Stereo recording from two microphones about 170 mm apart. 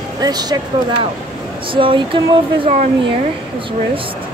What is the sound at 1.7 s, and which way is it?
Speech, 30° right (ahead or behind).